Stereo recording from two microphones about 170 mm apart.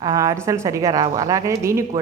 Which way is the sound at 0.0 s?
20° right (ahead or behind).